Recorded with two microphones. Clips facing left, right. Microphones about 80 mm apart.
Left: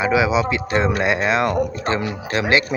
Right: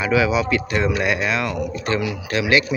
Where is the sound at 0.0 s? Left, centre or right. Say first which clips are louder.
Left 1 dB; left.